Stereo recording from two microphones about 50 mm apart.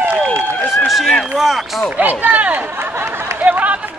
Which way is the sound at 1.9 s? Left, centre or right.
Right.